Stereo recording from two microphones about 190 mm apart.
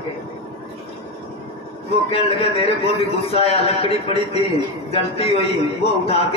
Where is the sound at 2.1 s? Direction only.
30° left (ahead or behind).